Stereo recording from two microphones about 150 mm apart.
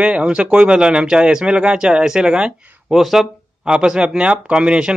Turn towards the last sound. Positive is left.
turn(degrees=-5)  # may be behind; listen again after turning